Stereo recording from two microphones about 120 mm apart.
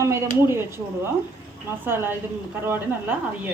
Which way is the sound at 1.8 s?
20° right (ahead or behind).